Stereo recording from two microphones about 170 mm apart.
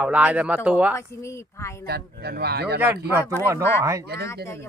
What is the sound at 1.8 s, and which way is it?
Speech, 70° right (ahead or behind).